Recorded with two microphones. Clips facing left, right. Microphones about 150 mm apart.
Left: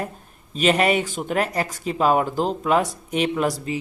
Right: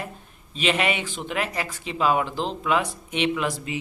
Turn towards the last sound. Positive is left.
turn(degrees=40)  # may be behind; listen again after turning